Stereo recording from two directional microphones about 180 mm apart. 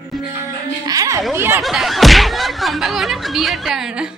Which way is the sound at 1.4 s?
10° right (ahead or behind).